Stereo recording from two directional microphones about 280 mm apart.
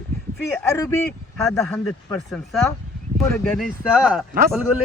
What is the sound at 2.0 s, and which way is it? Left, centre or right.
Speech, centre.